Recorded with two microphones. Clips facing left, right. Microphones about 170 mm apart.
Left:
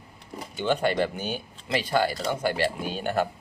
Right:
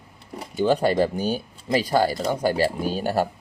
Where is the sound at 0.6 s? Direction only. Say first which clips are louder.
Right 4 dB; 35° right (ahead or behind).